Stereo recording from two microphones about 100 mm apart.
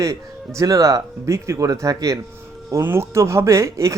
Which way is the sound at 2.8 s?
25° right (ahead or behind).